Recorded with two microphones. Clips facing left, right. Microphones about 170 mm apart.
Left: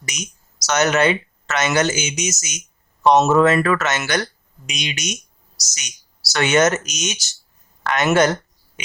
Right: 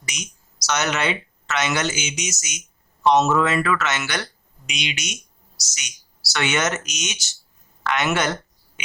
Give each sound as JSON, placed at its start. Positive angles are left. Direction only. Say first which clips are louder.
{"t": 0.1, "sound": "speech", "louder": "left 3 dB", "side_deg": 45}
{"t": 6.3, "sound": "speech", "louder": "left 7 dB", "side_deg": 40}
{"t": 7.9, "sound": "a sound", "louder": "left 6 dB", "side_deg": 45}